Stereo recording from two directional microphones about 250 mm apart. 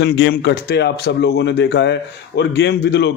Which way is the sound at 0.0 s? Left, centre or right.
Left.